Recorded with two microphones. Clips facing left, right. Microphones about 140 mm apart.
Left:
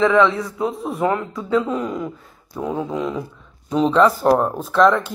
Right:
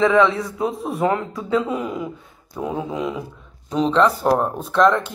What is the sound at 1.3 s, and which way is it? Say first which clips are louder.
Speech: left 1 dB; 10° right (ahead or behind).